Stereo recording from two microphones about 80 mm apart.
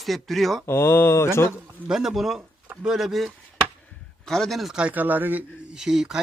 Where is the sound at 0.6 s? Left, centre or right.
Left.